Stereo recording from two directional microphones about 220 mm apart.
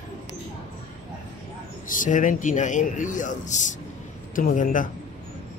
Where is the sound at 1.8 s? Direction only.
35° left (ahead or behind).